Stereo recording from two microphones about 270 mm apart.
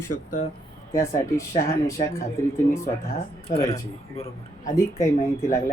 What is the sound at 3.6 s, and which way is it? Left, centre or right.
Speech, centre.